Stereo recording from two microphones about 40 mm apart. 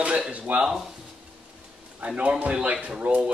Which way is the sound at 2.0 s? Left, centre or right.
Right.